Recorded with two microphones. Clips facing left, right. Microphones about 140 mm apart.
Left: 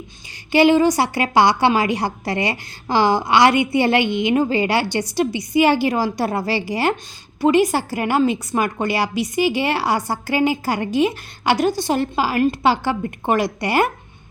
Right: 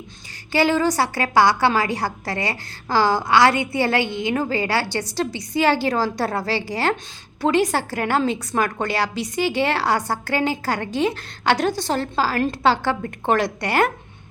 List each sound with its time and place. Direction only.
0.5 s a woman's voice: 20° left (ahead or behind)